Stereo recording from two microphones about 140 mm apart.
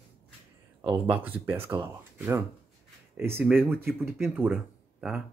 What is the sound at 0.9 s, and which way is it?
Speech, 10° right (ahead or behind).